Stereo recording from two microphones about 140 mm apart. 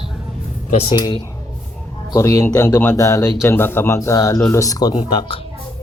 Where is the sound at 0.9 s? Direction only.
30° left (ahead or behind).